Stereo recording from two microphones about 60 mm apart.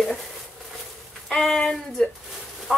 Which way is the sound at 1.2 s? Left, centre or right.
Centre.